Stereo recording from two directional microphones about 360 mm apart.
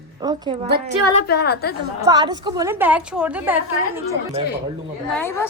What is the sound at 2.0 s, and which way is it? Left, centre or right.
A woman's voice, centre.